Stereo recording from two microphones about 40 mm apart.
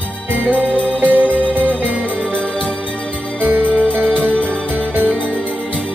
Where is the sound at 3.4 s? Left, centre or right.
Right.